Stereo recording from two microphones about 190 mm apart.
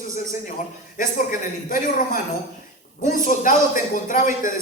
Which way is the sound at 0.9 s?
45° left (ahead or behind).